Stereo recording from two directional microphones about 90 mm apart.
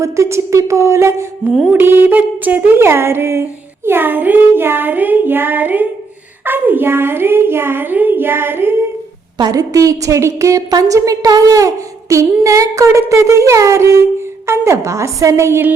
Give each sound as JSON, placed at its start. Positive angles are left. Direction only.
{"t": 0.0, "sound": "a woman's voice", "side_deg": -30}
{"t": 1.7, "sound": "child singing", "side_deg": -25}
{"t": 9.4, "sound": "a woman's voice", "side_deg": -40}